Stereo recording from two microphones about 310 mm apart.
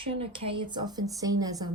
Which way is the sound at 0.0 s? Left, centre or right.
Centre.